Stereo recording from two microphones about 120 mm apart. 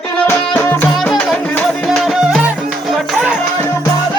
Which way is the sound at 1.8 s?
Centre (ahead or behind).